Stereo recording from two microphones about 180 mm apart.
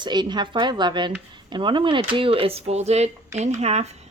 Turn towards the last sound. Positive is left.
turn(degrees=-35)  # may be behind; listen again after turning